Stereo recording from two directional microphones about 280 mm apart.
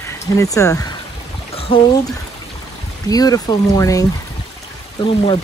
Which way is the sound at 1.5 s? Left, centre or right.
Centre.